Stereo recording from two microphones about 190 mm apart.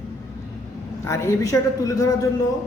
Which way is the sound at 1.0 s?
15° left (ahead or behind).